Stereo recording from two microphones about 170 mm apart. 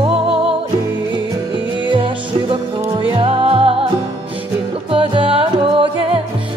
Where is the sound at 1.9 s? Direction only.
30° right (ahead or behind).